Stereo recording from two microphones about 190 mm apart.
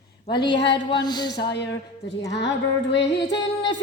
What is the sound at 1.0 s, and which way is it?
Speech, 20° left (ahead or behind).